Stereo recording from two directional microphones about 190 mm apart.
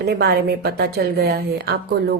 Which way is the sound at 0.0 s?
60° right (ahead or behind).